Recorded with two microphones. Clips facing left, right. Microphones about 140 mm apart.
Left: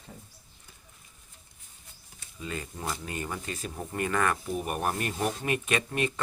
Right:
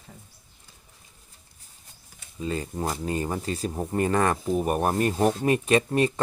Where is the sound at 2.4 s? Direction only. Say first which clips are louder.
Right 8 dB; 30° right (ahead or behind).